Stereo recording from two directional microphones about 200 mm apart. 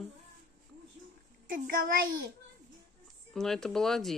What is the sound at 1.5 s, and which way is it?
Speech, 45° right (ahead or behind).